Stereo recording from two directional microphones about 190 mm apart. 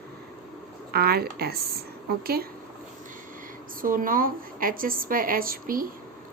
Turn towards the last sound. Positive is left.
turn(degrees=-50)  # may be behind; listen again after turning